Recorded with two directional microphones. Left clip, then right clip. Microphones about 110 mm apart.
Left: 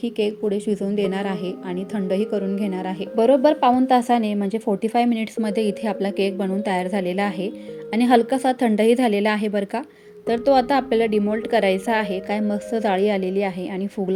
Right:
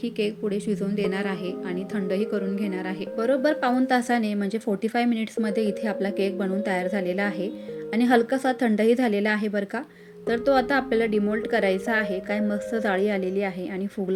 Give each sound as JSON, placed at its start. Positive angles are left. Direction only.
{"t": 0.0, "sound": "a woman's voice", "side_deg": 45}
{"t": 3.2, "sound": "a woman's voice", "side_deg": 30}